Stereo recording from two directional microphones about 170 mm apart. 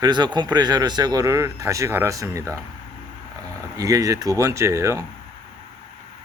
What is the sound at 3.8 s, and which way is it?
Speech, 20° right (ahead or behind).